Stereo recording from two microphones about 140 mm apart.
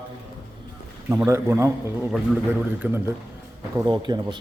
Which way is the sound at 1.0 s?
20° right (ahead or behind).